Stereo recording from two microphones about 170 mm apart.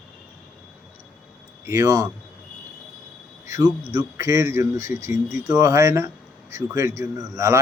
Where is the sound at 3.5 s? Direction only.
20° right (ahead or behind).